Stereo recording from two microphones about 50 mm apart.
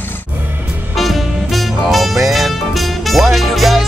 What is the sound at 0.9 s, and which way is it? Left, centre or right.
Music, centre.